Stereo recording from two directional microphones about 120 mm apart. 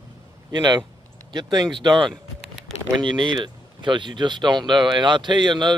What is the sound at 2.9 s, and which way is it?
Speech, 40° right (ahead or behind).